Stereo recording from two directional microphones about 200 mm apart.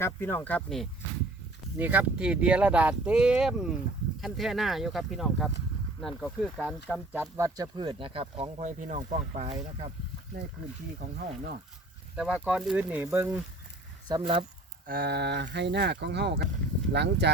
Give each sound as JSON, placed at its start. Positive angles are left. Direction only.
{"t": 0.0, "sound": "speech", "side_deg": 10}
{"t": 1.8, "sound": "speech", "side_deg": -10}
{"t": 11.0, "sound": "speech", "side_deg": -45}
{"t": 12.1, "sound": "speech", "side_deg": -5}
{"t": 14.1, "sound": "speech", "side_deg": -25}
{"t": 14.8, "sound": "speech", "side_deg": -50}